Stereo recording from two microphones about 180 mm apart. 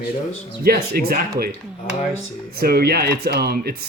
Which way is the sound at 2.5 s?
60° right (ahead or behind).